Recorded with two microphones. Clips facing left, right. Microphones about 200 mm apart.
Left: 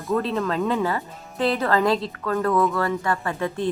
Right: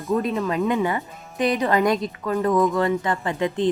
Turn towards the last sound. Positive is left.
turn(degrees=-20)  # may be behind; listen again after turning